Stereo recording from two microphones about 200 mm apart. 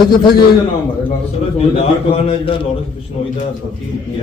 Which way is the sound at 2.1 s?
25° left (ahead or behind).